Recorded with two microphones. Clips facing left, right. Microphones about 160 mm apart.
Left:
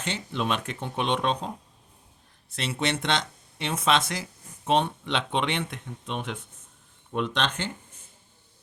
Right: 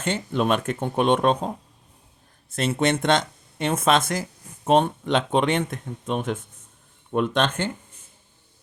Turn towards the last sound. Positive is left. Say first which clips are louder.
# right 5 dB
turn(degrees=-50)  # may be behind; listen again after turning